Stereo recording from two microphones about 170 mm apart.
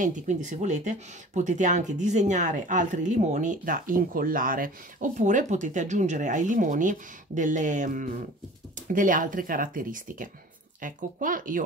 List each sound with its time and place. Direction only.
0.0 s speech: 45° right (ahead or behind)